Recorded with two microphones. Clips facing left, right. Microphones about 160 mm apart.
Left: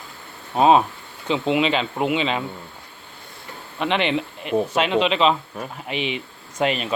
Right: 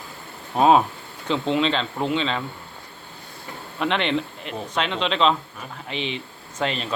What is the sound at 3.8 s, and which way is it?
A man's voice, 5° left (ahead or behind).